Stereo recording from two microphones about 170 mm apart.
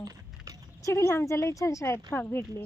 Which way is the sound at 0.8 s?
15° left (ahead or behind).